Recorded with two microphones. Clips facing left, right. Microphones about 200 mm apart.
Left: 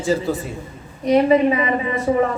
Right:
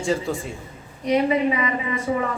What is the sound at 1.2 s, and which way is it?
A woman's voice, 35° left (ahead or behind).